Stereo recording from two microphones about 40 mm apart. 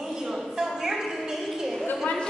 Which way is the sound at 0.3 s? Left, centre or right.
Centre.